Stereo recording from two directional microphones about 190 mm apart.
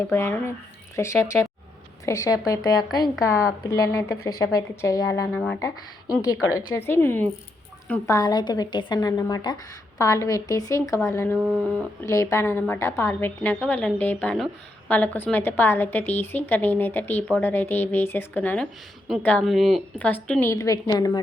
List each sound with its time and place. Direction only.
0.1 s a woman's voice: 10° left (ahead or behind)
6.6 s a woman's voice: 10° left (ahead or behind)